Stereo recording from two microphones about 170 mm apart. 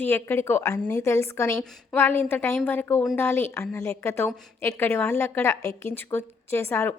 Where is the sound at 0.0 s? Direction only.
15° left (ahead or behind).